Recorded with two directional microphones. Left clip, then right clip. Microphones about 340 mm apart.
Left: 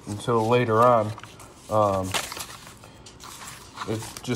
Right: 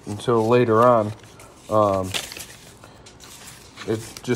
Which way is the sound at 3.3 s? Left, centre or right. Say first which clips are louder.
Left 4 dB; centre.